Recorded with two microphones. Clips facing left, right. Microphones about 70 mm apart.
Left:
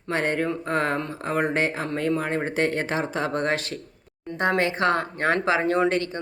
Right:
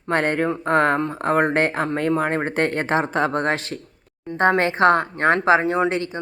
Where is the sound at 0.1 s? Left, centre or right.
Right.